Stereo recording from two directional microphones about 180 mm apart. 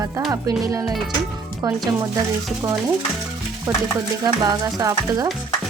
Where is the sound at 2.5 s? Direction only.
5° right (ahead or behind).